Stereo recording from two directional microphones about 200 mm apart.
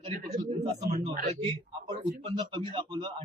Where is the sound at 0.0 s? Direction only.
35° right (ahead or behind).